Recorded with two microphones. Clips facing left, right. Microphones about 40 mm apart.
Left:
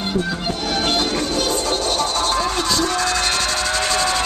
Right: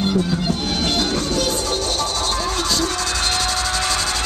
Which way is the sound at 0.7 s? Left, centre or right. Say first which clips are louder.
Left 3 dB; left.